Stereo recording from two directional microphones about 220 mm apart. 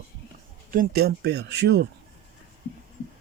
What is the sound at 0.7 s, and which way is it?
Speech, 40° right (ahead or behind).